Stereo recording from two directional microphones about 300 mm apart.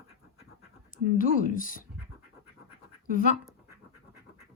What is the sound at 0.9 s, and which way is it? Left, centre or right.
Speech, left.